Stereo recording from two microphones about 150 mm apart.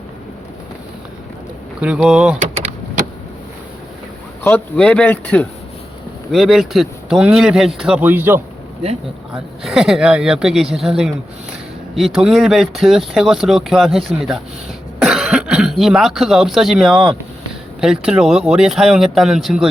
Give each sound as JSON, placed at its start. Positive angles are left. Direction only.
{"t": 1.8, "sound": "speech", "side_deg": -5}
{"t": 4.4, "sound": "speech", "side_deg": 10}
{"t": 6.3, "sound": "speech", "side_deg": 0}
{"t": 8.8, "sound": "speech", "side_deg": -40}
{"t": 9.3, "sound": "speech", "side_deg": -5}